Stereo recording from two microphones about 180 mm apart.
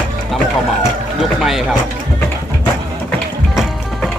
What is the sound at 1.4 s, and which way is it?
Speech, centre (ahead or behind).